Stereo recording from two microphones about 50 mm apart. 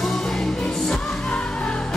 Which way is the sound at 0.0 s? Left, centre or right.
Centre.